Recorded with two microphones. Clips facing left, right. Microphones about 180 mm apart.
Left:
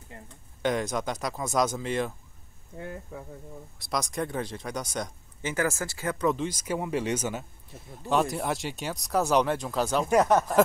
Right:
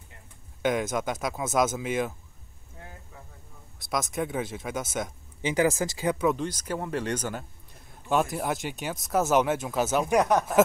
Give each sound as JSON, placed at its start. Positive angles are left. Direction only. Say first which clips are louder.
{"t": 0.6, "sound": "speech", "louder": "right 1 dB", "side_deg": 0}
{"t": 2.8, "sound": "speech", "louder": "left 10 dB", "side_deg": 65}
{"t": 3.8, "sound": "speech", "louder": "right 1 dB", "side_deg": 0}
{"t": 5.4, "sound": "speech", "louder": "right 4 dB", "side_deg": -15}
{"t": 6.2, "sound": "speech", "louder": "right 1 dB", "side_deg": 5}